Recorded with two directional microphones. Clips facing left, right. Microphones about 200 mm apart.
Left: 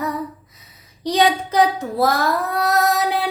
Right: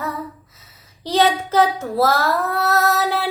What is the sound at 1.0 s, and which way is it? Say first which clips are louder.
Child singing: even; 15° left (ahead or behind).